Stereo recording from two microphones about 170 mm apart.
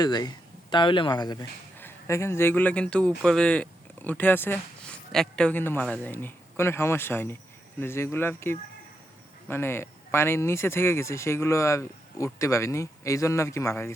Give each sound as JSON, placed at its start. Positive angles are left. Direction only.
{"t": 0.0, "sound": "speech", "side_deg": 25}